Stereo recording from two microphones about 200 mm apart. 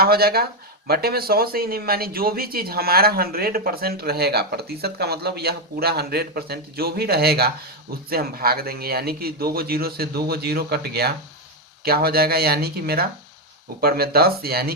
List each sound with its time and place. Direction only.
0.0 s speech: 50° right (ahead or behind)